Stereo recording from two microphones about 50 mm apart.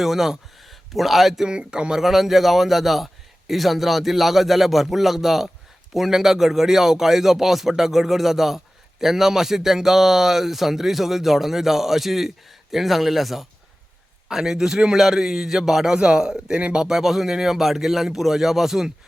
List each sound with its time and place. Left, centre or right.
0.0 s a man's voice: centre
1.5 s a man's voice: centre
2.0 s a man's voice: centre